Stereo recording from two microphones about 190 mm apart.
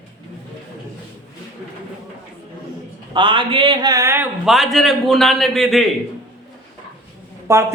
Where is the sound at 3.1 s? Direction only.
25° right (ahead or behind).